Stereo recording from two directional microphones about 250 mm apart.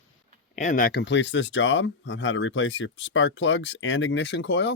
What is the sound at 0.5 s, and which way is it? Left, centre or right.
Speech, left.